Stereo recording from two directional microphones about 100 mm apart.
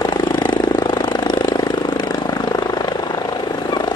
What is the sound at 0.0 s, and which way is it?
Vehicle, 45° left (ahead or behind).